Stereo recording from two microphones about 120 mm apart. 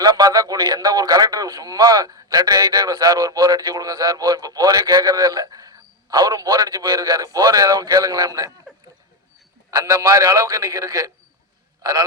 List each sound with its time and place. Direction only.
0.0 s a man's voice: 30° right (ahead or behind)
9.6 s a man's voice: 30° right (ahead or behind)